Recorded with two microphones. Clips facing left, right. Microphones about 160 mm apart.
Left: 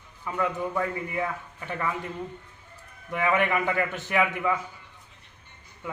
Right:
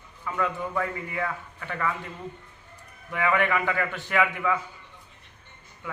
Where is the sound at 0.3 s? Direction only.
20° left (ahead or behind).